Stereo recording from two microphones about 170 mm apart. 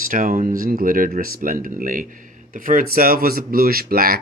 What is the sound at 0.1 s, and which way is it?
Speech, 50° right (ahead or behind).